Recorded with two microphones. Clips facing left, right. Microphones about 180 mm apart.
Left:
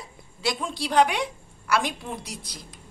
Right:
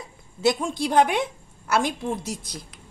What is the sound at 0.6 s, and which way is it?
Speech, 50° right (ahead or behind).